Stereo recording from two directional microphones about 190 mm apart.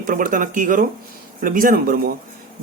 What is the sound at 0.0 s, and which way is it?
Speech, 45° right (ahead or behind).